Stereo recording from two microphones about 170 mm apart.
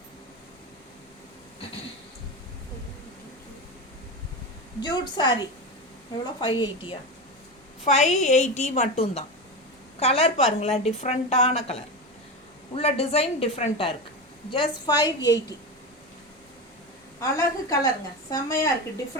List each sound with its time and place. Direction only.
4.8 s a woman's voice: 25° left (ahead or behind)
7.9 s a woman's voice: 40° left (ahead or behind); by 15.5 s 20° left (ahead or behind)
17.2 s a woman's voice: 20° left (ahead or behind)